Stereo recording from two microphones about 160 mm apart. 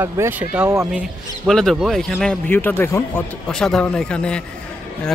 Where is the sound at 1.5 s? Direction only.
Centre (ahead or behind).